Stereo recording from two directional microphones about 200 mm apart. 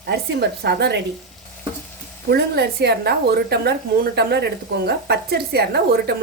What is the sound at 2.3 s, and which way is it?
A woman's voice, 55° right (ahead or behind).